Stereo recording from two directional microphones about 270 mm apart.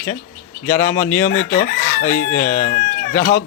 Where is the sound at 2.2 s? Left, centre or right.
Left.